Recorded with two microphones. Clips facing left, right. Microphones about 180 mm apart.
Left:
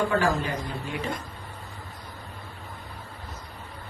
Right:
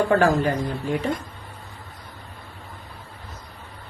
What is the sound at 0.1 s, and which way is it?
Speech, 45° right (ahead or behind).